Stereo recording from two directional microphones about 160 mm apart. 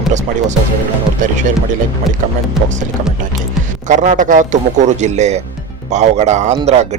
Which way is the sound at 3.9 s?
50° right (ahead or behind).